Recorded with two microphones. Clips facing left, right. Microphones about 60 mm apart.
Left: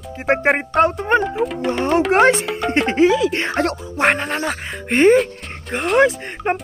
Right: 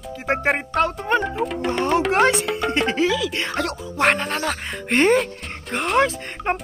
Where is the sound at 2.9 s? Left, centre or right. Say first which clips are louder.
Left 6 dB; left.